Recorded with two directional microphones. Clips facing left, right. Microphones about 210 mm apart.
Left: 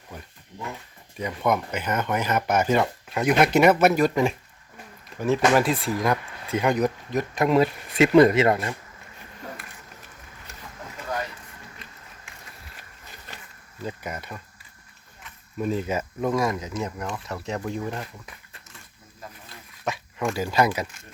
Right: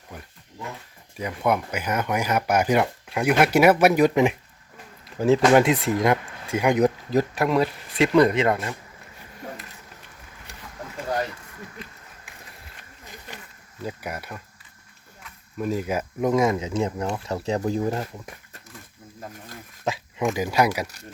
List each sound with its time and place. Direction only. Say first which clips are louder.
1.2 s speech: right 1 dB; 10° right (ahead or behind)
5.1 s speech: right 4 dB; 25° right (ahead or behind); by 6.8 s 10° right (ahead or behind)
6.8 s speech: right 4 dB; 30° right (ahead or behind)
7.3 s speech: left 2 dB; centre (ahead or behind)
13.3 s insect: right 3 dB; 15° right (ahead or behind)
13.8 s speech: right 1 dB; 10° right (ahead or behind)
15.5 s speech: even; 5° right (ahead or behind); by 18.6 s 40° right (ahead or behind)
19.8 s dog: right 2 dB; 25° right (ahead or behind)
20.3 s speech: even; 15° right (ahead or behind)
20.8 s speech: right 2 dB; 40° right (ahead or behind)